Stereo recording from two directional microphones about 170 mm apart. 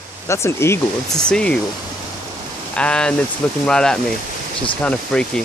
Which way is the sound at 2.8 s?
5° left (ahead or behind).